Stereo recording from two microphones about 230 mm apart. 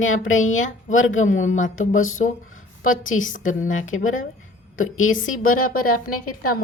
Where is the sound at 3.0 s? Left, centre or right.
Left.